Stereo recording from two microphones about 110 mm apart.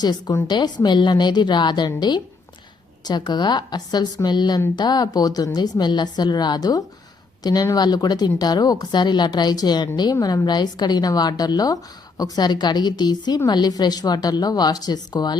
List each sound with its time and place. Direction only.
0.0 s a woman's voice: 40° left (ahead or behind)